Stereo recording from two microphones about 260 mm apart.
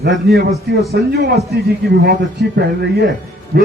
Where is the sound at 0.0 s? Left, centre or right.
Right.